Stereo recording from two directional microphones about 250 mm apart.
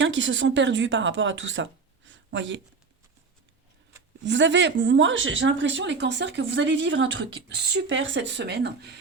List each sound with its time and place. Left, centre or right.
0.0 s speech: right
4.2 s speech: right